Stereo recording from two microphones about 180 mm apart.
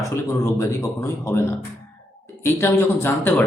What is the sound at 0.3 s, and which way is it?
Speech, 15° left (ahead or behind).